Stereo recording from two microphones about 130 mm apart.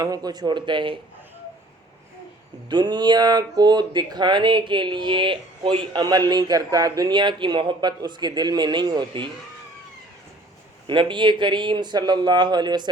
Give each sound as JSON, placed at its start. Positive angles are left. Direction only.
{"t": 0.0, "sound": "speech", "side_deg": -30}
{"t": 2.6, "sound": "speech", "side_deg": -35}
{"t": 10.8, "sound": "speech", "side_deg": -40}